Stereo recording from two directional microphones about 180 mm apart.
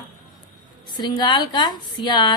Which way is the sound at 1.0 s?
25° left (ahead or behind).